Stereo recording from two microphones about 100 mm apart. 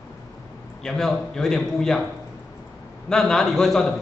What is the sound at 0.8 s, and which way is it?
A man's voice, 5° left (ahead or behind).